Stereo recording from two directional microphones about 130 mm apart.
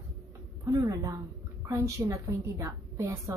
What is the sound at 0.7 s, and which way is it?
A woman's voice, 25° right (ahead or behind).